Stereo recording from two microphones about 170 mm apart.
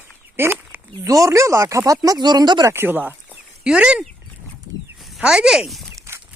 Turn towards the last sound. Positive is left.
turn(degrees=-15)  # may be behind; listen again after turning